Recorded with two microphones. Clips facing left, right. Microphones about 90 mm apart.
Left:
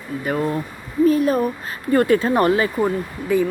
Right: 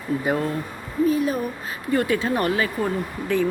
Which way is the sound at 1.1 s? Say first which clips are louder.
Left 6 dB; 45° left (ahead or behind).